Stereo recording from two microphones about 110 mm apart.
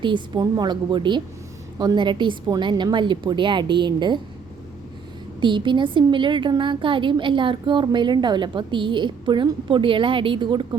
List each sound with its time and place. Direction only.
0.0 s a woman's voice: 40° right (ahead or behind)
5.4 s a woman's voice: 45° right (ahead or behind)